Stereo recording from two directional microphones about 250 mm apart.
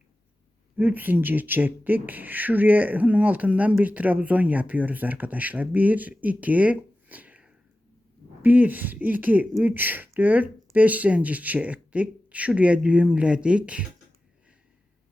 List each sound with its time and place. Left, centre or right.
0.8 s speech: centre